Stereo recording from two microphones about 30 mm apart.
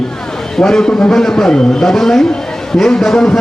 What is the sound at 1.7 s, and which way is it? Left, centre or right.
A man's voice, centre.